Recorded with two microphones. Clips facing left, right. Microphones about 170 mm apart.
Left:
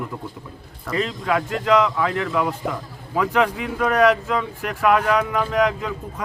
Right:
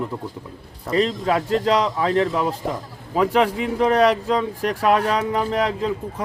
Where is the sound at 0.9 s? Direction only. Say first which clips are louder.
Right 3 dB; 30° right (ahead or behind).